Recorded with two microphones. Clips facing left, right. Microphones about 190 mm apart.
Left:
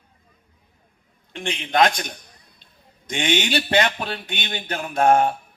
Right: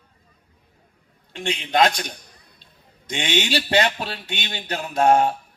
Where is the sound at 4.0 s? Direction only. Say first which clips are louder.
Left 1 dB; 55° left (ahead or behind).